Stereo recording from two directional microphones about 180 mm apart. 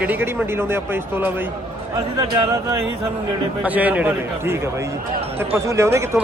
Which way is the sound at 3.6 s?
10° right (ahead or behind).